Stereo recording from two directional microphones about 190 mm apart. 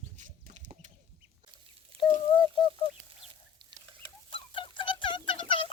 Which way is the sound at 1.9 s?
30° right (ahead or behind).